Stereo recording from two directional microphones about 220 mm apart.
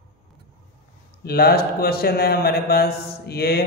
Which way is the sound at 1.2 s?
45° left (ahead or behind).